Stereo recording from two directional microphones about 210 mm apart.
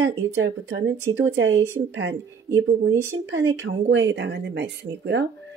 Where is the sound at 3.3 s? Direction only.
15° right (ahead or behind).